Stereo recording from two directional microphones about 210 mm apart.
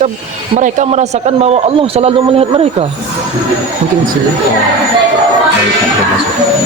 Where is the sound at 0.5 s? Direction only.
30° right (ahead or behind).